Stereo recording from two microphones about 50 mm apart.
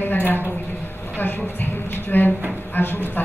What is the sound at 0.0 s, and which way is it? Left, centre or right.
A woman's voice, left.